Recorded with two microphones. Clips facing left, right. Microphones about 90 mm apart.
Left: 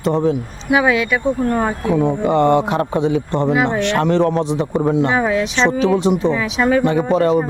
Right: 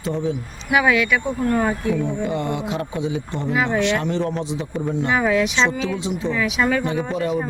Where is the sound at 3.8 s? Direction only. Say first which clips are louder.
Left 5 dB; 60° left (ahead or behind).